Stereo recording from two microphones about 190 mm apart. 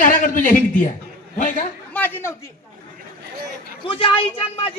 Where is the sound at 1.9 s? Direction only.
10° left (ahead or behind).